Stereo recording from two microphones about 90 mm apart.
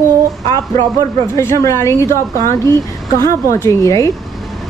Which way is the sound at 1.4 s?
30° left (ahead or behind).